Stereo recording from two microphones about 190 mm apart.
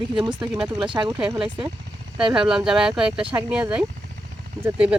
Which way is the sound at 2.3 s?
5° right (ahead or behind).